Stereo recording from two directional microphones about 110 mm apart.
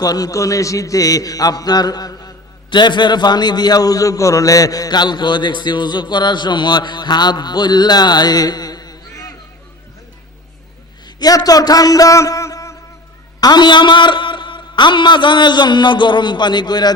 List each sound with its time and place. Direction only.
0.0 s a man's voice: 35° left (ahead or behind)
11.0 s a man's voice: 35° left (ahead or behind)
13.4 s a man's voice: 40° left (ahead or behind)